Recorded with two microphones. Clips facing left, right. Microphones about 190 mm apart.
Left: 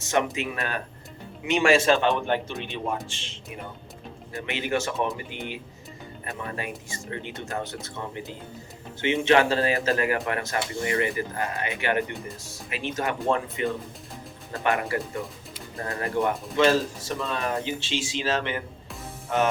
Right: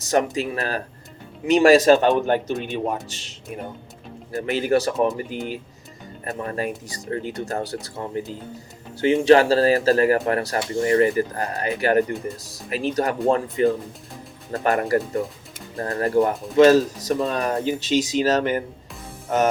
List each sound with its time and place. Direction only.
0.0 s speech: 40° right (ahead or behind)
6.2 s speech: 40° right (ahead or behind)
19.3 s music: 40° right (ahead or behind)